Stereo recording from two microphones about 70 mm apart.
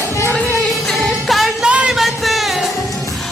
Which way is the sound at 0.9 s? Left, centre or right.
Centre.